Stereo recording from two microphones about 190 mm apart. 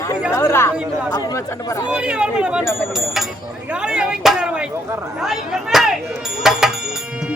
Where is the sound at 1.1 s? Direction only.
20° left (ahead or behind).